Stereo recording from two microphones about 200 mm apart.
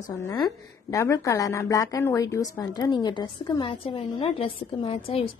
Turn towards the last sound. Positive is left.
turn(degrees=30)  # may be behind; listen again after turning